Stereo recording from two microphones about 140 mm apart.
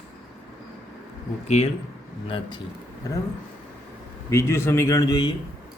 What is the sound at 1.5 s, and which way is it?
Speech, 50° left (ahead or behind).